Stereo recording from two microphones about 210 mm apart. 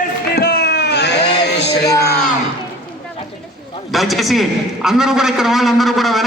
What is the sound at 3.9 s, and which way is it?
A man's voice, centre (ahead or behind).